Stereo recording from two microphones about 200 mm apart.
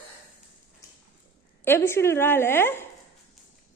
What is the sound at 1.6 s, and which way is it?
A woman's voice, 10° left (ahead or behind).